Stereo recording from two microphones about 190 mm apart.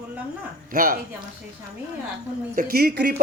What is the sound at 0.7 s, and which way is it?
Speech, 50° right (ahead or behind).